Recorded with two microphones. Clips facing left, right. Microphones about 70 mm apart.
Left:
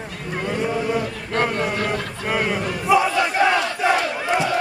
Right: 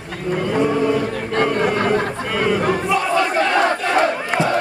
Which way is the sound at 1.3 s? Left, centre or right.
Right.